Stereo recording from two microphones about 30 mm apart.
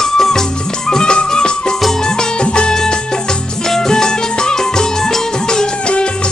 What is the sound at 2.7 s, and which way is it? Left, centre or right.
Music, left.